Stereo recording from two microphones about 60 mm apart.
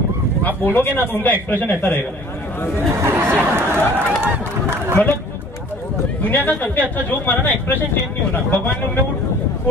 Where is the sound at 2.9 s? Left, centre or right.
Right.